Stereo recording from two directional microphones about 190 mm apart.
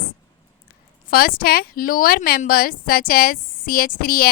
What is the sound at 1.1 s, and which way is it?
A woman's voice, 50° left (ahead or behind).